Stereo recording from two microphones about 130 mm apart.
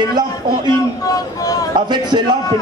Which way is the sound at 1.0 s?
25° left (ahead or behind).